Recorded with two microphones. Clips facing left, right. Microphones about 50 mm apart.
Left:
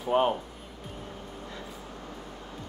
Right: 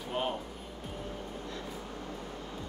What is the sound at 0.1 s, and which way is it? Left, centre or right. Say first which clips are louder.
Speech: left 9 dB; left.